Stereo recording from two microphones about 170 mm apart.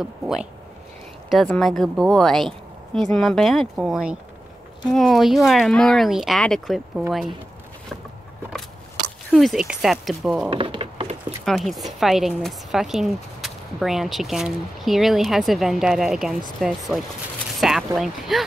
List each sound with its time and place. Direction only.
0.0 s speech: 5° right (ahead or behind)
9.3 s speech: centre (ahead or behind)
10.5 s wood: 30° right (ahead or behind)
11.4 s speech: centre (ahead or behind)